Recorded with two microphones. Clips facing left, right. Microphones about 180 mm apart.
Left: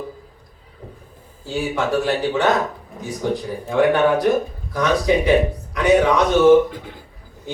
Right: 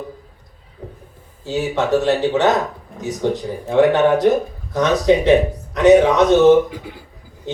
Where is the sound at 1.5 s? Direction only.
20° right (ahead or behind).